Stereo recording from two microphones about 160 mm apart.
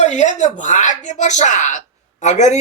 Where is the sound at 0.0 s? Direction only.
45° left (ahead or behind).